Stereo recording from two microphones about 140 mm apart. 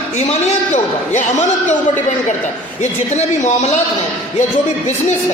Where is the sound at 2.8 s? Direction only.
55° left (ahead or behind).